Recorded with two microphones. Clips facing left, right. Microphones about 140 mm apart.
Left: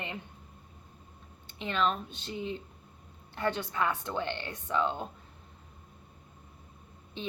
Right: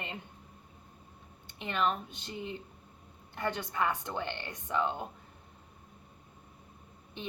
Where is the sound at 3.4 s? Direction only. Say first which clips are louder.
Left 2 dB; 15° right (ahead or behind).